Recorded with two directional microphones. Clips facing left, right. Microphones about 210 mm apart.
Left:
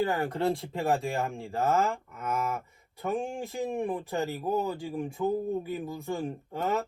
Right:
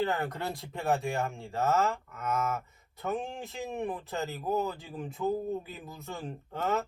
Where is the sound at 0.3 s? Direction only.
30° left (ahead or behind).